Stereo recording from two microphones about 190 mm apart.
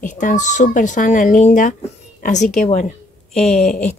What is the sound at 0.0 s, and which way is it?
Speech, 40° left (ahead or behind).